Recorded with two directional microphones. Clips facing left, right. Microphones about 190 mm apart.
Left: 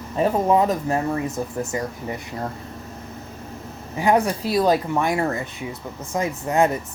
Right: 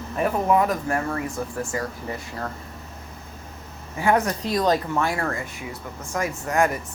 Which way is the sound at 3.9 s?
15° left (ahead or behind).